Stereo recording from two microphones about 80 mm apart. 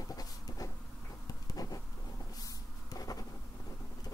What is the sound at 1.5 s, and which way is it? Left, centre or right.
Bee, left.